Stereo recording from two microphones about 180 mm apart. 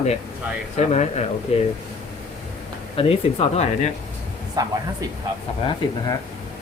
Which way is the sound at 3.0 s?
30° left (ahead or behind).